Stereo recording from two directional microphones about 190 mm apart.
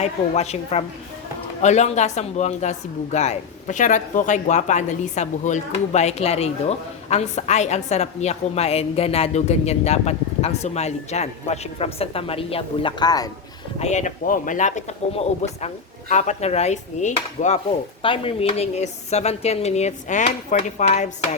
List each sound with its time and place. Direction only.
0.0 s speech: 35° left (ahead or behind)
13.7 s speech: 35° left (ahead or behind)
18.0 s speech: 30° left (ahead or behind)